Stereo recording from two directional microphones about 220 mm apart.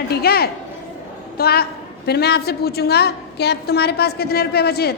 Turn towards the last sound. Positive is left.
turn(degrees=45)  # may be behind; listen again after turning